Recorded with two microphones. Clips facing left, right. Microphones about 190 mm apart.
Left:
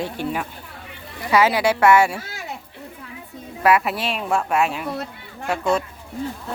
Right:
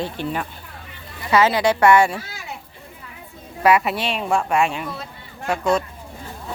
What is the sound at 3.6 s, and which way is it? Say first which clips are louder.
Speech: right 1 dB; centre (ahead or behind).